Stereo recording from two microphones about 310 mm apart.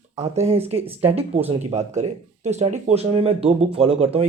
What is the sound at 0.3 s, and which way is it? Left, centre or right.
Speech, centre.